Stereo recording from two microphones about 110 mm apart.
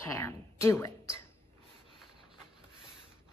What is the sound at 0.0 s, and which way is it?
Female singing, 25° left (ahead or behind).